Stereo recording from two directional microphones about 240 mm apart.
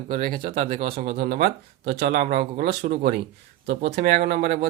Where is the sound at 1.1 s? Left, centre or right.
Right.